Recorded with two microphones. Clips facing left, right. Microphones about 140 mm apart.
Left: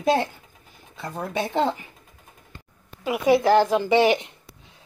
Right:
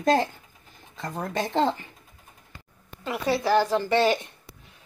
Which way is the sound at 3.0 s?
10° left (ahead or behind).